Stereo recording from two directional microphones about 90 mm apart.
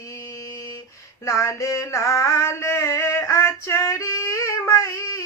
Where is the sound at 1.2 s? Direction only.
35° left (ahead or behind).